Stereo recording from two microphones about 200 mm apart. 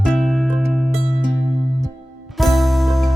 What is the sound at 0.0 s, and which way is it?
Music, centre (ahead or behind).